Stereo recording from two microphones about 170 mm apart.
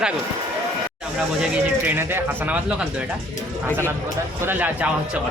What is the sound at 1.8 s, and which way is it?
Speech, 10° right (ahead or behind).